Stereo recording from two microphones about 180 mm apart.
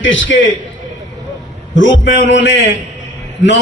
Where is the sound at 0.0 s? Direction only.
90° left.